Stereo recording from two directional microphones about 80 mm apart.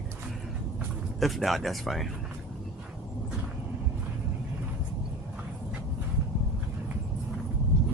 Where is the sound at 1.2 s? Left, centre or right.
Centre.